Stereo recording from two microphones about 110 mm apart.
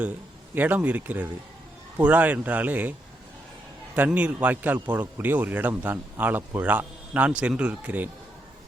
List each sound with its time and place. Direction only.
0.5 s a man's voice: 15° right (ahead or behind)
3.9 s a man's voice: 15° right (ahead or behind)